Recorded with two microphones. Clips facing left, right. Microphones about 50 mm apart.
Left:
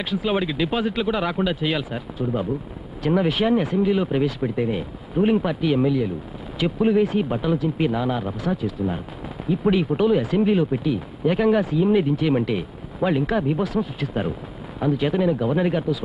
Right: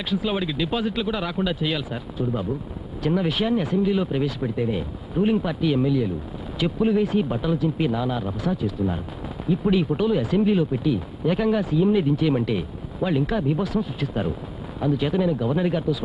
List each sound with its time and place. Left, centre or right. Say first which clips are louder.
0.0 s speech: left 2 dB; left